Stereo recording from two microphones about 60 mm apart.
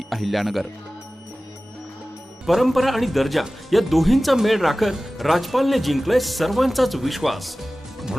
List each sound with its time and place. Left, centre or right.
0.1 s speech: centre
2.5 s speech: centre